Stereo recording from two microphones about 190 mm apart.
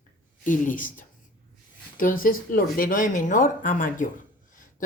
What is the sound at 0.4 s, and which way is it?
Speech, 45° left (ahead or behind).